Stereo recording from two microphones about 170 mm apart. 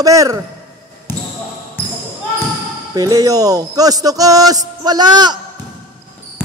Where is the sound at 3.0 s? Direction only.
20° right (ahead or behind).